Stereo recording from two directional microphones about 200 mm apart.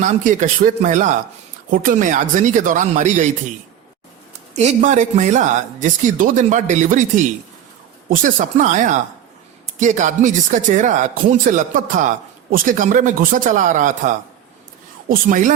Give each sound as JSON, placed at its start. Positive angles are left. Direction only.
{"t": 0.0, "sound": "a man's voice", "side_deg": -40}
{"t": 4.5, "sound": "a man's voice", "side_deg": -35}
{"t": 15.1, "sound": "a man's voice", "side_deg": -40}